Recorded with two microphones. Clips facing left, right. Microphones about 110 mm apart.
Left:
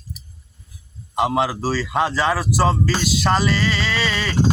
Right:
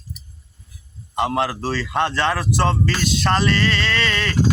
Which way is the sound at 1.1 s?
5° left (ahead or behind).